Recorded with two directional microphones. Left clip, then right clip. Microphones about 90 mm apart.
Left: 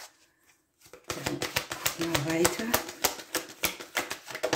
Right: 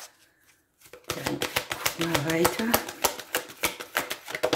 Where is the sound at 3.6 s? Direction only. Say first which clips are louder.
Right 2 dB; 50° right (ahead or behind).